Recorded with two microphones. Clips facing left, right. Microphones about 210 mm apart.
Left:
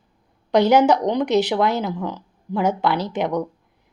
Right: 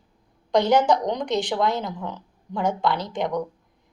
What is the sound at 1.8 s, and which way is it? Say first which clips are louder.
Speech: left 5 dB; 80° left.